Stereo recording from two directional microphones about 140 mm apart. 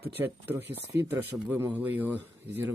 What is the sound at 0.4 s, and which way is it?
Speech, 15° right (ahead or behind).